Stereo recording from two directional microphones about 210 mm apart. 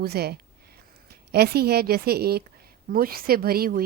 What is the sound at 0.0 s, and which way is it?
A woman's voice, 50° right (ahead or behind).